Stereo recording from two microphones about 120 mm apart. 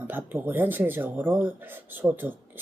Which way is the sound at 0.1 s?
15° right (ahead or behind).